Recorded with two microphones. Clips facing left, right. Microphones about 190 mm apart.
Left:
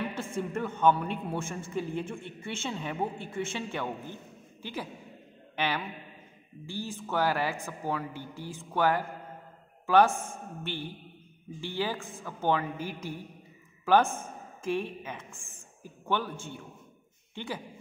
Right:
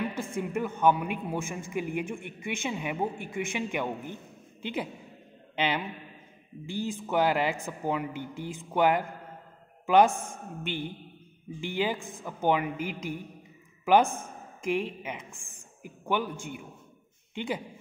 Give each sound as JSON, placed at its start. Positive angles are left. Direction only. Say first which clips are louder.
{"t": 0.1, "sound": "a woman's voice", "louder": "right 2 dB", "side_deg": -10}
{"t": 14.6, "sound": "a woman's voice", "louder": "right 2 dB", "side_deg": -15}
{"t": 17.3, "sound": "a sound", "louder": "right 5 dB", "side_deg": -20}